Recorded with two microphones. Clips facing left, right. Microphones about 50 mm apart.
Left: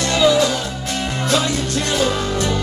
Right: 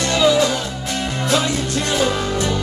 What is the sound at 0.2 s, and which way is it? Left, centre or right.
Music, centre.